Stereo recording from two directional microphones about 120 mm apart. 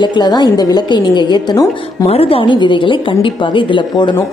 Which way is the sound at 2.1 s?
50° left (ahead or behind).